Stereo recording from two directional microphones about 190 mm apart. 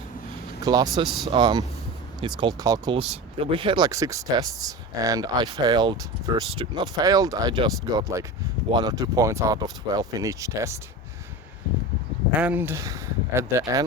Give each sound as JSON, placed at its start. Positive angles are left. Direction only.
{"t": 0.6, "sound": "speech", "side_deg": -20}
{"t": 3.0, "sound": "speech", "side_deg": -30}
{"t": 12.3, "sound": "speech", "side_deg": -5}